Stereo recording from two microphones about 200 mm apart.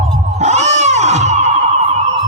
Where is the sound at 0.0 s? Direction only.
35° right (ahead or behind).